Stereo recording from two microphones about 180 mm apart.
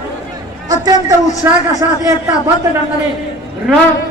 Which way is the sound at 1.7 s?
20° right (ahead or behind).